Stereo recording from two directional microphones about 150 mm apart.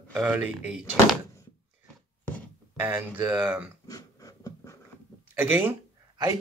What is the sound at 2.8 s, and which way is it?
Speech, 15° right (ahead or behind).